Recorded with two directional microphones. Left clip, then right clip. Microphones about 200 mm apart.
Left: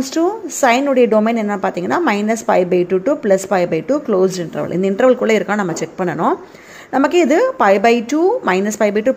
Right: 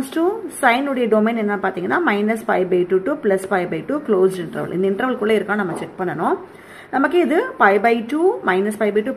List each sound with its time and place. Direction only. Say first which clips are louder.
0.1 s a woman's voice: left 2 dB; 30° left (ahead or behind)